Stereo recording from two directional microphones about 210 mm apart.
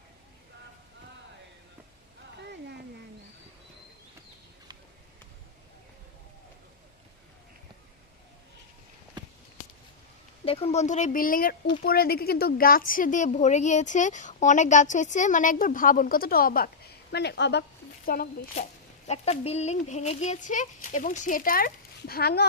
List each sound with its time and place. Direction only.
9.2 s a sound: 20° right (ahead or behind)
10.4 s speech: 30° left (ahead or behind); by 18.6 s 45° left (ahead or behind)
19.0 s speech: 30° left (ahead or behind); by 22.4 s 50° left (ahead or behind)